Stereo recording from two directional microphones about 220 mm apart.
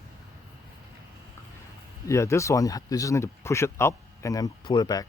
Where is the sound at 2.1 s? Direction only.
15° left (ahead or behind).